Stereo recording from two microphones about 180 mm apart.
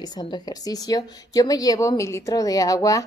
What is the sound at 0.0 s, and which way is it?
A woman's voice, 25° left (ahead or behind).